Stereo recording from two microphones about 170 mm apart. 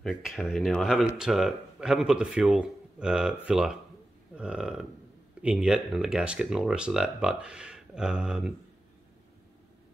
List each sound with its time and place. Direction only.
0.0 s speech: centre (ahead or behind)